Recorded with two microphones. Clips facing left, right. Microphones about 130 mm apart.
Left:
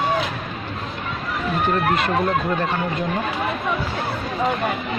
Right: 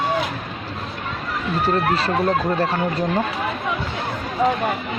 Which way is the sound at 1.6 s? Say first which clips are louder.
Right 1 dB; 35° right (ahead or behind).